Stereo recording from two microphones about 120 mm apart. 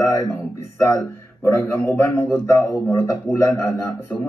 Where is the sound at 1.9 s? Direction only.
25° left (ahead or behind).